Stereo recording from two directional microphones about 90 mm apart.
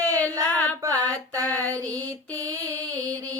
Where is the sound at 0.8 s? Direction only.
40° right (ahead or behind).